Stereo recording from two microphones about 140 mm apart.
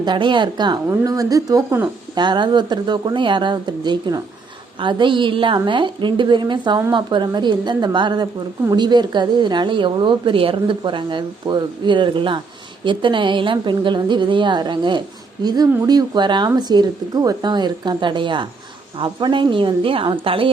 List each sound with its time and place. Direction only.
0.0 s a woman's voice: 35° right (ahead or behind)